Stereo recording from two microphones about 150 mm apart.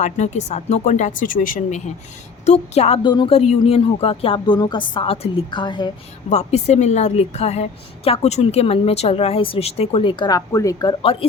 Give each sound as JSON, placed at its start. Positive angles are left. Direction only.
{"t": 0.0, "sound": "a woman's voice", "side_deg": 50}
{"t": 2.5, "sound": "a woman's voice", "side_deg": 45}
{"t": 3.0, "sound": "a woman's voice", "side_deg": 30}
{"t": 3.3, "sound": "a woman's voice", "side_deg": 45}
{"t": 6.3, "sound": "a woman's voice", "side_deg": 45}
{"t": 11.0, "sound": "a woman's voice", "side_deg": 40}